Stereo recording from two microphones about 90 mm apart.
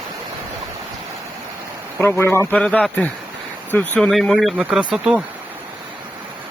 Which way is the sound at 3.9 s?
10° left (ahead or behind).